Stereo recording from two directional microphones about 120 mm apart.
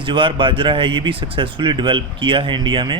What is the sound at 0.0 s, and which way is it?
A man's voice, 45° right (ahead or behind).